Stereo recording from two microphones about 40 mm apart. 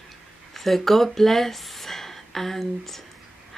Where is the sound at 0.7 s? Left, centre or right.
Centre.